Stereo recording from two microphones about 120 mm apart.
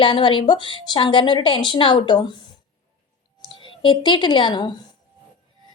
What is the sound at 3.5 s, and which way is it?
Speech, 45° left (ahead or behind).